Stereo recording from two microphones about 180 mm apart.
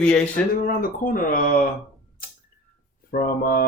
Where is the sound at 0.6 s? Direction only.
55° left (ahead or behind).